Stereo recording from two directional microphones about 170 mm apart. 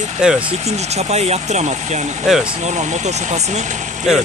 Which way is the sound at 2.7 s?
45° right (ahead or behind).